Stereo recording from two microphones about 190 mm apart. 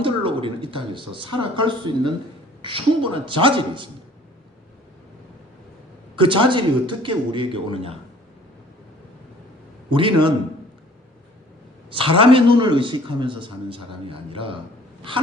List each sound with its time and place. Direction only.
0.0 s a man's voice: 25° right (ahead or behind)
6.1 s a man's voice: 25° right (ahead or behind)
9.9 s a man's voice: 25° right (ahead or behind)
11.9 s a man's voice: 25° right (ahead or behind)